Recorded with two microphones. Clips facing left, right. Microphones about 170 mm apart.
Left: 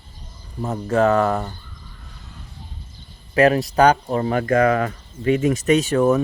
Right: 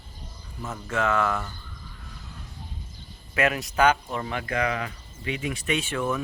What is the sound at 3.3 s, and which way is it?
Speech, 35° left (ahead or behind).